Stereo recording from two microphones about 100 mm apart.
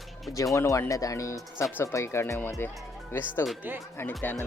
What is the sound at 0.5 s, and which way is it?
Speech, 30° left (ahead or behind).